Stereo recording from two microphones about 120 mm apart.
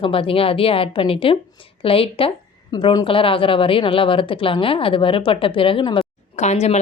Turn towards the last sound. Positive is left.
turn(degrees=65)  # may be behind; listen again after turning